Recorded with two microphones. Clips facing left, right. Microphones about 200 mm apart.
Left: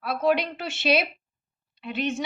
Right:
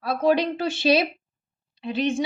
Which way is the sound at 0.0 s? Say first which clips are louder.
Right 2 dB; 35° right (ahead or behind).